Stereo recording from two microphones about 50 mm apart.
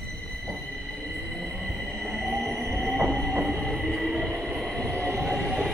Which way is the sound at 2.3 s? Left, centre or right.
Centre.